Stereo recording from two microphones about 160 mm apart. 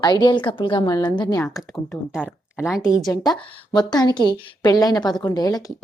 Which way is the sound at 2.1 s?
5° right (ahead or behind).